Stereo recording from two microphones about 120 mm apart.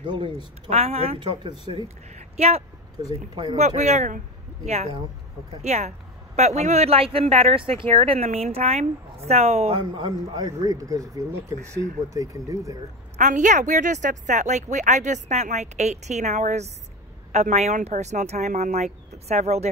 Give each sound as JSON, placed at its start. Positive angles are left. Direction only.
{"t": 0.0, "sound": "speech", "side_deg": -40}
{"t": 0.7, "sound": "a woman's voice", "side_deg": -60}
{"t": 9.9, "sound": "speech", "side_deg": -35}
{"t": 13.2, "sound": "a woman's voice", "side_deg": -90}